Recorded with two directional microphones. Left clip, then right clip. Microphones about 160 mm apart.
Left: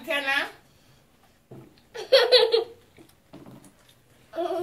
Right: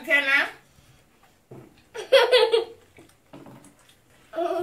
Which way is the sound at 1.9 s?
15° left (ahead or behind).